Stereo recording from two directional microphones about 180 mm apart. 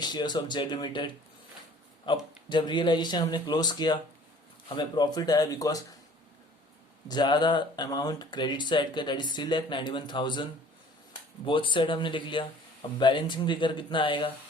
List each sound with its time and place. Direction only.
0.0 s speech: 25° left (ahead or behind)
7.1 s speech: 25° left (ahead or behind)
11.4 s speech: 30° left (ahead or behind)